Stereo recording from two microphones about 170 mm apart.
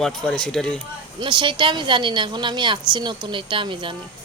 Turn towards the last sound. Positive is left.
turn(degrees=-30)  # may be behind; listen again after turning